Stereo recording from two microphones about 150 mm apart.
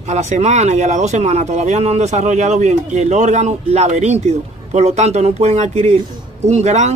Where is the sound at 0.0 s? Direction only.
50° right (ahead or behind).